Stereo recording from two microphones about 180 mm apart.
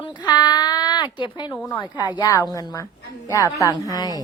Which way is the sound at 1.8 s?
25° left (ahead or behind).